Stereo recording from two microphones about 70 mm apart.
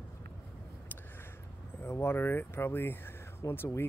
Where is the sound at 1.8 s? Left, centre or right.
Left.